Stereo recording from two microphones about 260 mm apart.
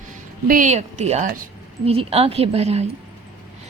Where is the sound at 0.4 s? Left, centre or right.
Right.